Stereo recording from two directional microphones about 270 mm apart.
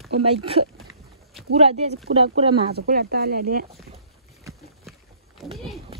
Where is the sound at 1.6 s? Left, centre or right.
Right.